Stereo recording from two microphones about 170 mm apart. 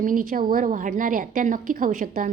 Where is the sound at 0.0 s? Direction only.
50° right (ahead or behind).